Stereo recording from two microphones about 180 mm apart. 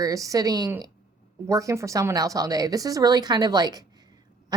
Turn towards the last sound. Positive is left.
turn(degrees=-20)  # may be behind; listen again after turning